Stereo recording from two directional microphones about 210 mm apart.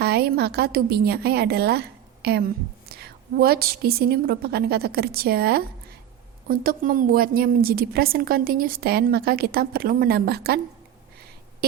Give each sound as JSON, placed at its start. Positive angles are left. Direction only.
{"t": 0.0, "sound": "a woman's voice", "side_deg": -50}